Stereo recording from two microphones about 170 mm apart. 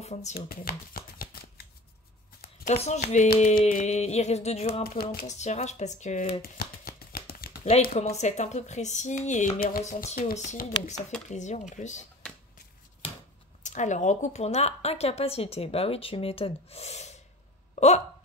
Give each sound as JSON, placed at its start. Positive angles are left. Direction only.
{"t": 0.0, "sound": "speech", "side_deg": 40}
{"t": 0.5, "sound": "shuffling cards", "side_deg": 60}
{"t": 2.7, "sound": "a woman's voice", "side_deg": 40}
{"t": 4.8, "sound": "speech", "side_deg": 60}
{"t": 5.2, "sound": "speech", "side_deg": 45}
{"t": 6.4, "sound": "a sound", "side_deg": 60}
{"t": 7.9, "sound": "speech", "side_deg": 40}
{"t": 10.0, "sound": "speech", "side_deg": 45}
{"t": 13.6, "sound": "a woman's voice", "side_deg": 45}